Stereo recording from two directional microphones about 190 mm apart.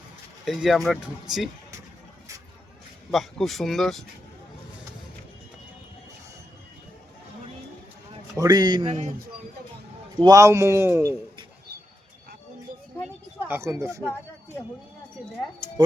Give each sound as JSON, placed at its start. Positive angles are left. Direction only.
{"t": 0.4, "sound": "speech", "side_deg": 0}
{"t": 3.1, "sound": "speech", "side_deg": 0}
{"t": 8.4, "sound": "speech", "side_deg": -20}
{"t": 10.2, "sound": "a man's voice", "side_deg": -20}
{"t": 13.5, "sound": "a man's voice", "side_deg": -15}
{"t": 14.0, "sound": "speech", "side_deg": 10}